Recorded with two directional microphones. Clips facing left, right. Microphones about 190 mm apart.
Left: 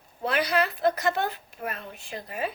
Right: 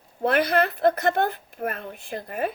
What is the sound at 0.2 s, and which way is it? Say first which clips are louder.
A woman's voice: right 4 dB; 55° right (ahead or behind).